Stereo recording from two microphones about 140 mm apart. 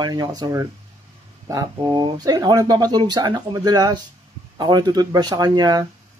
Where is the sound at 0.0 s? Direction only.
30° right (ahead or behind).